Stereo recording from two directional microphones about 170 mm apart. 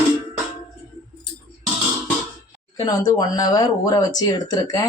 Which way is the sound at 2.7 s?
25° left (ahead or behind).